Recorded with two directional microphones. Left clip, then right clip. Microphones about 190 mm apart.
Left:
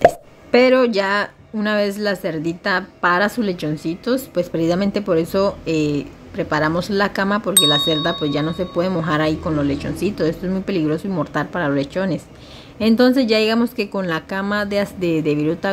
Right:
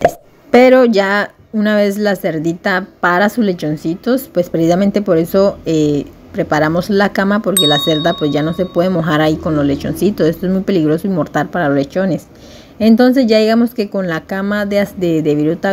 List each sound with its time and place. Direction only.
0.5 s a woman's voice: 25° right (ahead or behind)